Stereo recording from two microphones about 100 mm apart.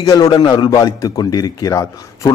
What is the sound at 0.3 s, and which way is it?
A man's voice, 45° left (ahead or behind).